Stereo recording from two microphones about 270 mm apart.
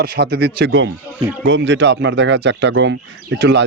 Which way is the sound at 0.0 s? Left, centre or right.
Right.